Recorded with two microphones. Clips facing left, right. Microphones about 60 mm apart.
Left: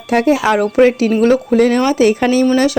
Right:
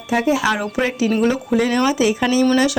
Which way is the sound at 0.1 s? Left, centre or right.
Left.